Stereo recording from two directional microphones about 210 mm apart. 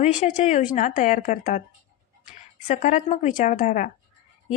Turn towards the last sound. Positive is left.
turn(degrees=40)  # may be behind; listen again after turning